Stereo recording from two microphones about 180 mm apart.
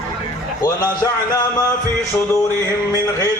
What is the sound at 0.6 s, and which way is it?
Music, 20° left (ahead or behind).